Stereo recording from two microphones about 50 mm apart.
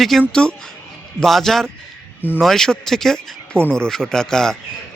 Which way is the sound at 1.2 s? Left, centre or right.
Centre.